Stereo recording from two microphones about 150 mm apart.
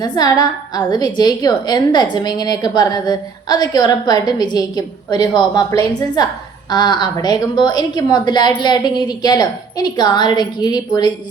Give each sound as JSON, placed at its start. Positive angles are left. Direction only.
{"t": 0.0, "sound": "a woman's voice", "side_deg": 25}